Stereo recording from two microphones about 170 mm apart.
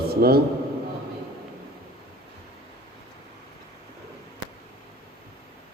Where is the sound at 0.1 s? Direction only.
65° right (ahead or behind).